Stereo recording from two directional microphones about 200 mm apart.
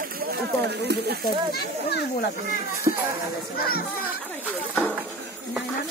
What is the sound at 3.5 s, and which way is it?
Speech, 50° left (ahead or behind).